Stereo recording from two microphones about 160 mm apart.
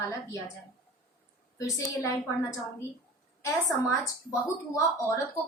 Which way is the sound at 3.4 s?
20° left (ahead or behind).